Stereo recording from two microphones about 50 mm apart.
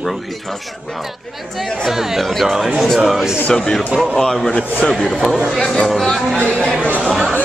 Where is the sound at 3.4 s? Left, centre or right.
Centre.